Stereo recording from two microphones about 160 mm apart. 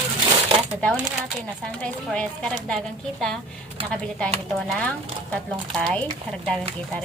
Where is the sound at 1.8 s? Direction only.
5° left (ahead or behind).